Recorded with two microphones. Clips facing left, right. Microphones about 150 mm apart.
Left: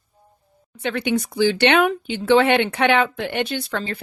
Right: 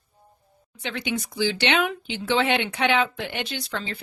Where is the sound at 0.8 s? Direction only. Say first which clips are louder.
Left 7 dB; 55° left (ahead or behind).